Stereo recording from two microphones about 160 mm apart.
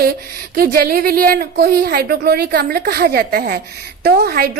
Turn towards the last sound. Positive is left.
turn(degrees=-75)  # may be behind; listen again after turning